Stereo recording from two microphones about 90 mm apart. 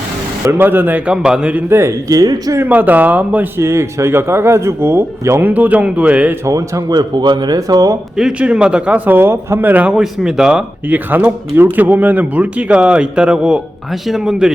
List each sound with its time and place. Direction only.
0.6 s speech: 25° right (ahead or behind)
1.7 s speech: 35° right (ahead or behind)
2.6 s speech: 20° right (ahead or behind)
3.6 s speech: 30° right (ahead or behind)
5.4 s speech: 20° right (ahead or behind)
6.4 s speech: 40° right (ahead or behind)
8.1 s speech: 10° right (ahead or behind)
10.0 s speech: 5° right (ahead or behind)
10.8 s speech: 20° right (ahead or behind); by 14.5 s 5° right (ahead or behind)